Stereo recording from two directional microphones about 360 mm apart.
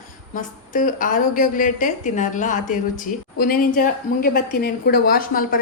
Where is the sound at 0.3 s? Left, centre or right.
Left.